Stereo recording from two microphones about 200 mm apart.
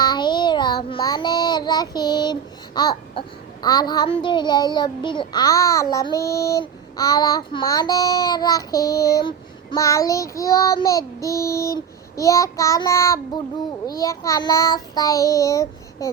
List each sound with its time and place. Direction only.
0.0 s child singing: 20° left (ahead or behind)